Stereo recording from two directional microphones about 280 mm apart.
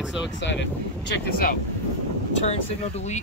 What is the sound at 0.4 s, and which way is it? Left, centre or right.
Speech, left.